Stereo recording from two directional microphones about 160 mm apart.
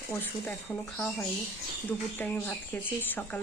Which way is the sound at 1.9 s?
10° left (ahead or behind).